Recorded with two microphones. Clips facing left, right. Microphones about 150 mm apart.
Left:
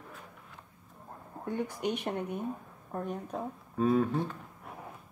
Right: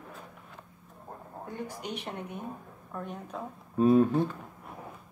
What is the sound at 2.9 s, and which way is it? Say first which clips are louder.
Speech: left 2 dB; 40° left (ahead or behind).